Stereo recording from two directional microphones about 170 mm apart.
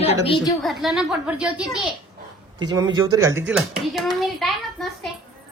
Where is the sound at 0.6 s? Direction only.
Centre (ahead or behind).